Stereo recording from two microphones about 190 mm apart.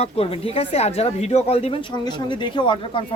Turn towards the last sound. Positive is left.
turn(degrees=25)  # may be behind; listen again after turning